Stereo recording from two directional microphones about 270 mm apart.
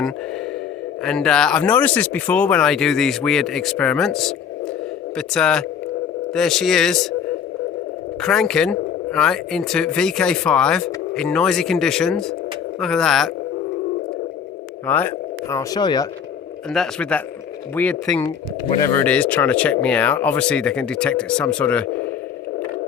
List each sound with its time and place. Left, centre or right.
1.0 s speech: centre
8.2 s speech: centre
14.8 s speech: centre
16.7 s speech: centre
18.3 s speech: centre
19.0 s speech: centre